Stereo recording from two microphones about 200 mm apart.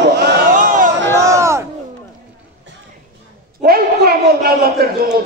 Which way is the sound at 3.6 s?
50° right (ahead or behind).